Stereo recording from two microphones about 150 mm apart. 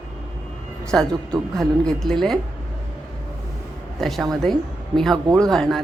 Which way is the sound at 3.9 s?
Centre (ahead or behind).